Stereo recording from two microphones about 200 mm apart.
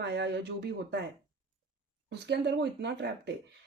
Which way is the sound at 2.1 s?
55° right (ahead or behind).